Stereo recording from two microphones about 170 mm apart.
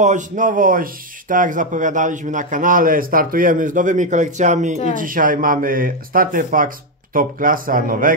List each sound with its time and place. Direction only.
0.0 s a man's voice: 50° right (ahead or behind)